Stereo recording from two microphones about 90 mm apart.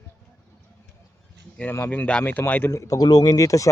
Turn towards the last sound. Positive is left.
turn(degrees=40)  # may be behind; listen again after turning